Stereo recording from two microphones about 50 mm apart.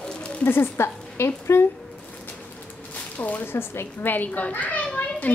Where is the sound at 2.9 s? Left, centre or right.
Left.